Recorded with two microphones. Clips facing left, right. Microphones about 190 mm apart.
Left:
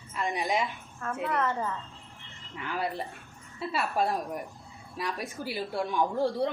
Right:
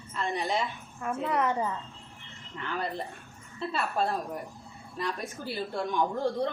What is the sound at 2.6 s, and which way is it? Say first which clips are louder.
A woman's voice: left 1 dB; 10° left (ahead or behind).